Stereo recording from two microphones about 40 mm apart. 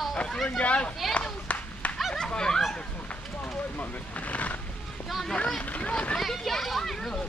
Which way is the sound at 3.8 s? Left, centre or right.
Left.